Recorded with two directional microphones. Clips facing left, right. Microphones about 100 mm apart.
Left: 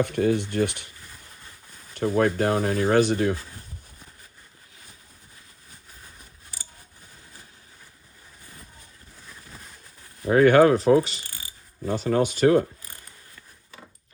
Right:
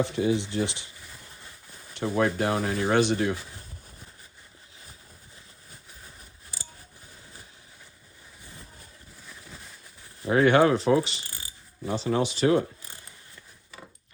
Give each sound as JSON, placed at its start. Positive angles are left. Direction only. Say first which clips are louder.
{"t": 0.2, "sound": "speech", "louder": "left 5 dB", "side_deg": 55}
{"t": 2.0, "sound": "speech", "louder": "left 3 dB", "side_deg": 45}
{"t": 10.2, "sound": "speech", "louder": "left 4 dB", "side_deg": 45}